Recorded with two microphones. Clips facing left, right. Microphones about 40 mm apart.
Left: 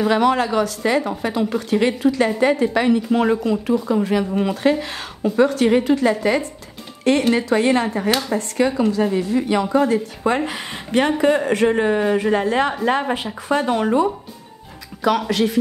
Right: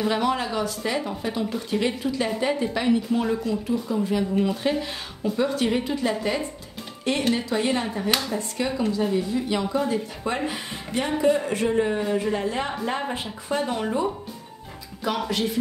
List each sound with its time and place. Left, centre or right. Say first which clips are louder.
0.1 s a woman's voice: left 7 dB; left
7.1 s speech: left 7 dB; left
8.3 s a woman's voice: left 7 dB; left
15.0 s speech: left 7 dB; left